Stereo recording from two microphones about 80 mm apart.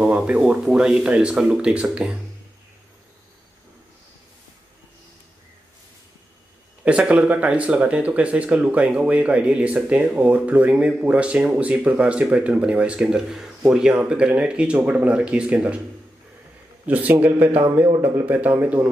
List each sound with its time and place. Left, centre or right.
0.4 s speech: centre
6.8 s speech: centre
16.8 s speech: centre